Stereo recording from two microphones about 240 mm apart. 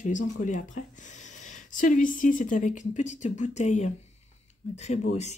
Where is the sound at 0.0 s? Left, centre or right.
Left.